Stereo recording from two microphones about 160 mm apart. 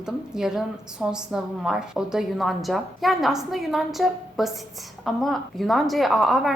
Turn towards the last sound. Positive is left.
turn(degrees=0)  # may be behind; listen again after turning